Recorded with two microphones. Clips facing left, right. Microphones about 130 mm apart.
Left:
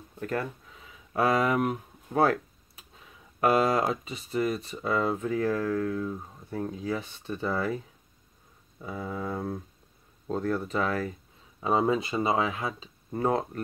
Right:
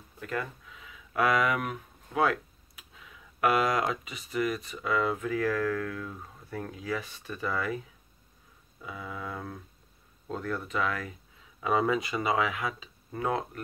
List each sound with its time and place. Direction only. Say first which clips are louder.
0.2 s speech: left 3 dB; 40° left (ahead or behind)
8.8 s speech: left 5 dB; 40° left (ahead or behind)